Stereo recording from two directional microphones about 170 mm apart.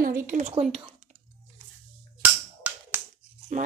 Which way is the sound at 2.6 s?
10° right (ahead or behind).